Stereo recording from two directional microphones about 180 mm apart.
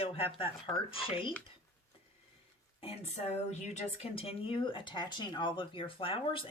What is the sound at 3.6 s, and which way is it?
Speech, 35° left (ahead or behind).